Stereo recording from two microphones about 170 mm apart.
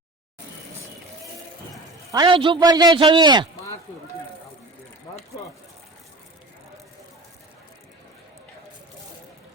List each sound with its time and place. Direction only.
2.1 s a man's voice: 30° right (ahead or behind)